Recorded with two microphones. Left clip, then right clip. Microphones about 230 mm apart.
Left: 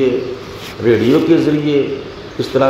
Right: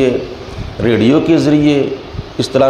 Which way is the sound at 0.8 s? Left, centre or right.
Right.